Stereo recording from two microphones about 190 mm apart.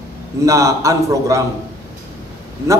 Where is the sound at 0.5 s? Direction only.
15° right (ahead or behind).